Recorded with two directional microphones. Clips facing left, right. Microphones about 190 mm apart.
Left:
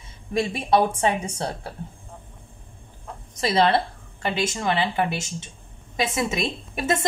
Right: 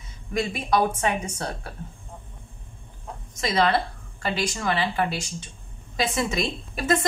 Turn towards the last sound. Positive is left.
turn(degrees=25)  # may be behind; listen again after turning